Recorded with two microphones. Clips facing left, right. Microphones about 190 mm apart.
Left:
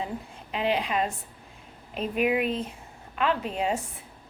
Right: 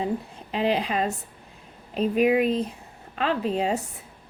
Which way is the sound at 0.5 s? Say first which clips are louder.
Right 2 dB; 35° right (ahead or behind).